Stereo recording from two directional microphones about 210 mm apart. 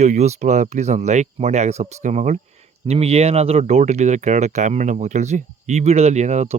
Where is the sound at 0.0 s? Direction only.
35° right (ahead or behind).